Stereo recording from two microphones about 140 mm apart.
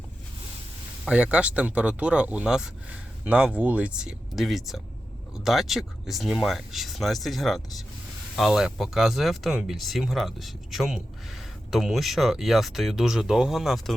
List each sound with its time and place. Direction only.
1.0 s speech: 10° right (ahead or behind)